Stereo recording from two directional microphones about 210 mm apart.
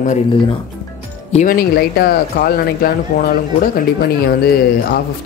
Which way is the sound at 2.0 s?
45° left (ahead or behind).